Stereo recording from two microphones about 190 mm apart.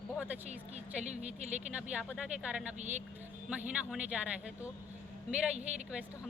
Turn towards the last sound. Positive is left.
turn(degrees=-35)  # may be behind; listen again after turning